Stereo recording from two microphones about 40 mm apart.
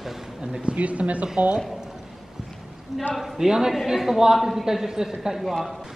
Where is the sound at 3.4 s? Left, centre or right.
Centre.